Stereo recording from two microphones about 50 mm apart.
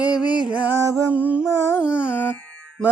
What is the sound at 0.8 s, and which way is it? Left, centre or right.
Music, right.